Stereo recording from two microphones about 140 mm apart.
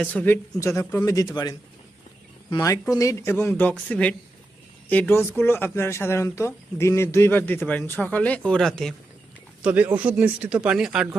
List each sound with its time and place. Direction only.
0.0 s speech: 10° left (ahead or behind)
1.0 s speech: 25° left (ahead or behind); by 9.0 s 5° left (ahead or behind)
9.6 s speech: 10° right (ahead or behind)